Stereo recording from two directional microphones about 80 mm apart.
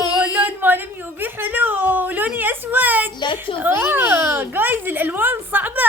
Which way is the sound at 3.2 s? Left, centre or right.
Left.